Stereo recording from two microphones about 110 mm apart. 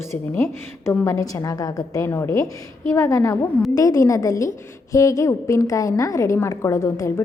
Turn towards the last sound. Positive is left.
turn(degrees=25)  # may be behind; listen again after turning